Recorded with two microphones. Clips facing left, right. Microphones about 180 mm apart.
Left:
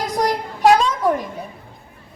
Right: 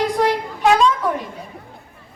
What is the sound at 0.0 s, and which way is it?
Child singing, 40° left (ahead or behind).